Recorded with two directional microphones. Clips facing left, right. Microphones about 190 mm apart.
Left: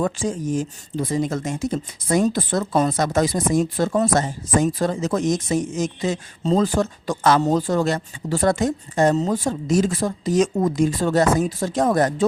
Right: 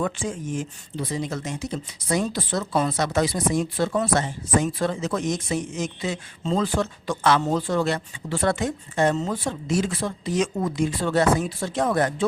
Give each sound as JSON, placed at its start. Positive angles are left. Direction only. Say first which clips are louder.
{"t": 0.0, "sound": "speech", "louder": "left 4 dB", "side_deg": 40}